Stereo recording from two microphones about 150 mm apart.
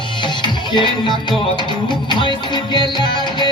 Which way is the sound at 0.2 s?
30° left (ahead or behind).